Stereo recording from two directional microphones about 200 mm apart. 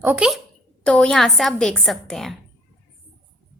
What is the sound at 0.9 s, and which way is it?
A woman's voice, 5° left (ahead or behind).